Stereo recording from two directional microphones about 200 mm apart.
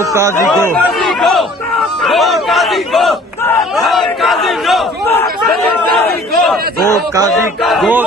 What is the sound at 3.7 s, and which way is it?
Battle cry, centre (ahead or behind).